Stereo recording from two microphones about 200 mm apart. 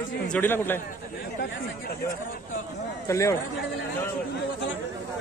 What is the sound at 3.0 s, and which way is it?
Speech, 15° left (ahead or behind).